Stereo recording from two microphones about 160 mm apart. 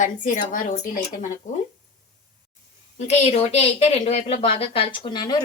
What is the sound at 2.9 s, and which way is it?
Speech, 45° left (ahead or behind).